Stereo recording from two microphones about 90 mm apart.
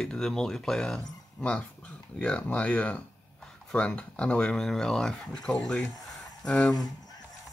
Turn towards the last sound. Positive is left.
turn(degrees=10)  # may be behind; listen again after turning